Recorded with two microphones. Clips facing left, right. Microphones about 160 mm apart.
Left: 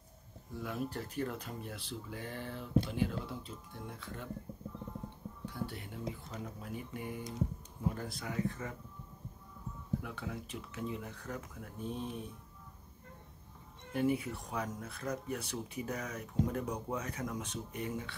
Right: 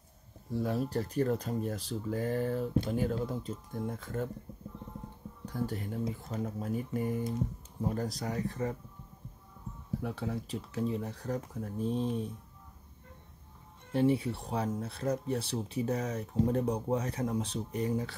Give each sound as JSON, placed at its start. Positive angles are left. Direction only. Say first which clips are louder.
{"t": 0.5, "sound": "speech", "louder": "right 7 dB", "side_deg": -35}
{"t": 5.4, "sound": "speech", "louder": "right 7 dB", "side_deg": -40}
{"t": 10.0, "sound": "speech", "louder": "right 7 dB", "side_deg": -35}
{"t": 13.9, "sound": "speech", "louder": "right 5 dB", "side_deg": -30}